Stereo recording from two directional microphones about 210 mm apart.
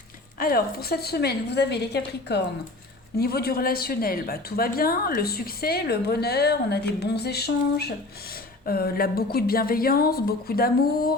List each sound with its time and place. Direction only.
0.3 s a woman's voice: 45° left (ahead or behind)